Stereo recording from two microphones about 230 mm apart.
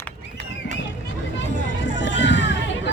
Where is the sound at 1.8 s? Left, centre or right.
Left.